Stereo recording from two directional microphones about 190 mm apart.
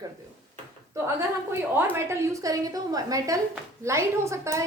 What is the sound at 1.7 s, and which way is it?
A woman's voice, 15° right (ahead or behind).